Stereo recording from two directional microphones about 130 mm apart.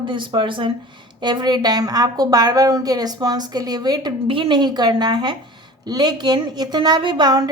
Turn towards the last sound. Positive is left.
turn(degrees=-30)  # may be behind; listen again after turning